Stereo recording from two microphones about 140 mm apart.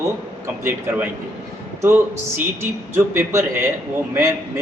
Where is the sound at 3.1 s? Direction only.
20° right (ahead or behind).